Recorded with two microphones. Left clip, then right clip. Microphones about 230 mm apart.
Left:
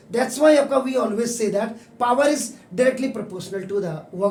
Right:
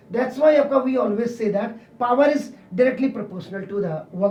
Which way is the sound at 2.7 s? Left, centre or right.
Left.